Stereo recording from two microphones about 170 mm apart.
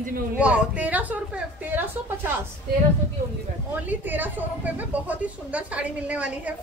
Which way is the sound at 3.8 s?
10° right (ahead or behind).